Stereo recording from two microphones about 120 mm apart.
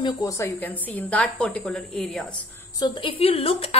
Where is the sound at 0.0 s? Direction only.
30° left (ahead or behind).